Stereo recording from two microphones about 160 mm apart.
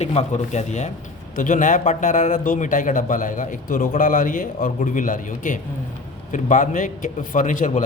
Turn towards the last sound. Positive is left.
turn(degrees=55)  # may be behind; listen again after turning